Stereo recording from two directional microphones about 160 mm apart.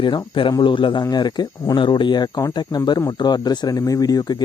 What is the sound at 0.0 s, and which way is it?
Speech, 30° left (ahead or behind).